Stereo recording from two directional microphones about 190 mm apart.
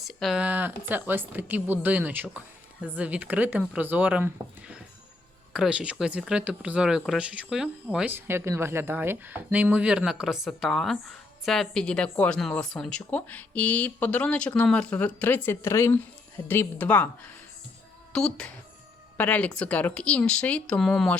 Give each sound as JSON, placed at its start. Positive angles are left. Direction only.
{"t": 0.0, "sound": "speech", "side_deg": 0}
{"t": 5.5, "sound": "speech", "side_deg": -5}
{"t": 18.1, "sound": "speech", "side_deg": 5}